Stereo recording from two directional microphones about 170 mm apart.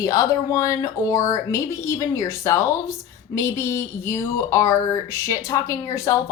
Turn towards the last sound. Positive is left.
turn(degrees=20)  # may be behind; listen again after turning